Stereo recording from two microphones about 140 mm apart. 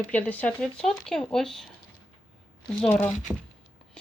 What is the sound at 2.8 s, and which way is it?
Speech, 10° left (ahead or behind).